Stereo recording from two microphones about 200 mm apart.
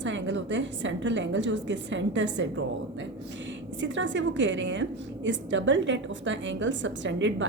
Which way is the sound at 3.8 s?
65° right (ahead or behind).